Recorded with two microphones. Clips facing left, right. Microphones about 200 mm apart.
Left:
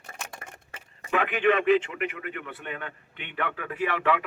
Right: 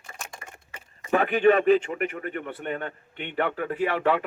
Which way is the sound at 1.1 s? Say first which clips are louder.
Right 4 dB; 40° right (ahead or behind).